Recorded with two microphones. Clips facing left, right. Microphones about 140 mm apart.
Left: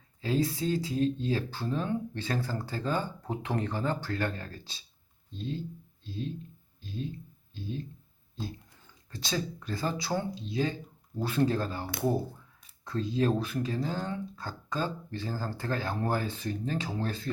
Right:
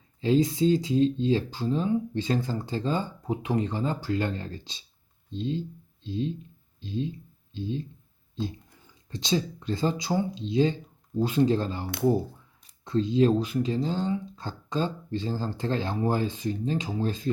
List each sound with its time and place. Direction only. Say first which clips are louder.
0.2 s speech: right 7 dB; 20° right (ahead or behind)
9.0 s speech: right 6 dB; 20° right (ahead or behind)